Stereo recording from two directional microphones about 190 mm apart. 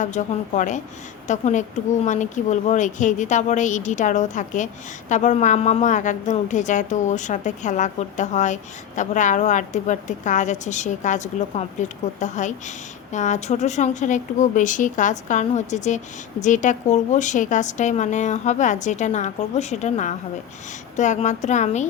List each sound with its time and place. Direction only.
0.0 s speech: 40° left (ahead or behind)